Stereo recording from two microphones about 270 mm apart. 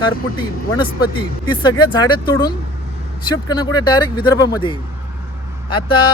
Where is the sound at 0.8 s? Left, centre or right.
Centre.